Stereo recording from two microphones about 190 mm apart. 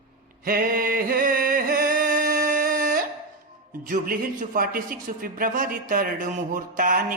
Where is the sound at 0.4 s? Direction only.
50° right (ahead or behind).